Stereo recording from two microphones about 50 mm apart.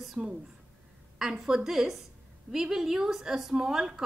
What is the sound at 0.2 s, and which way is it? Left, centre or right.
Speech, right.